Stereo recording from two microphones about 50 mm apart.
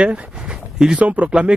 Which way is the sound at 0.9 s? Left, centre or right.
Right.